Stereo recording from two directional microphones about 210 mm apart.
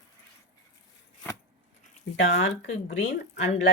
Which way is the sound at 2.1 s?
60° left (ahead or behind).